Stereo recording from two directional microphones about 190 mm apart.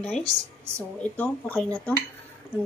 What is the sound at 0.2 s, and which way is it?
Speech, 20° right (ahead or behind).